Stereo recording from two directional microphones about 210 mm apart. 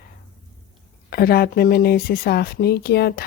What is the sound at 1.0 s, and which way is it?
Speech, 45° left (ahead or behind).